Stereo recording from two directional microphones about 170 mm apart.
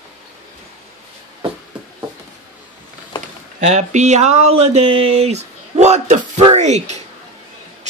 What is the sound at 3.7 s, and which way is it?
Speech, 45° right (ahead or behind).